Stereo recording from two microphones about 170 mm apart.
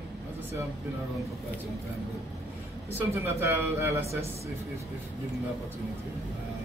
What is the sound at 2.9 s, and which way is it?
Speech, 15° right (ahead or behind).